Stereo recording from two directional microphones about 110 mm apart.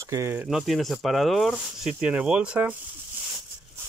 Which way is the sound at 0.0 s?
25° right (ahead or behind).